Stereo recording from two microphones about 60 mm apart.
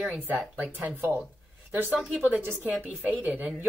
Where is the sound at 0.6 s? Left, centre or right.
Right.